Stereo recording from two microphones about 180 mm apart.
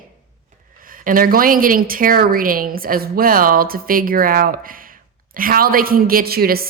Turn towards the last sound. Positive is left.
turn(degrees=-55)  # may be behind; listen again after turning